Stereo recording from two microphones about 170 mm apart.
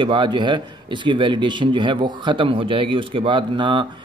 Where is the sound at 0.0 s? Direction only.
30° right (ahead or behind).